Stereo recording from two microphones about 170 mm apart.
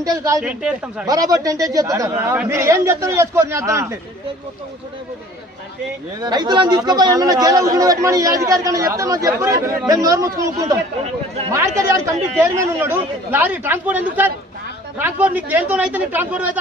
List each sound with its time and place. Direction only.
0.0 s speech: 20° right (ahead or behind)
0.4 s speech: 5° right (ahead or behind)
1.0 s a man's voice: 20° right (ahead or behind)
6.2 s a man's voice: 25° right (ahead or behind); by 16.5 s 10° right (ahead or behind)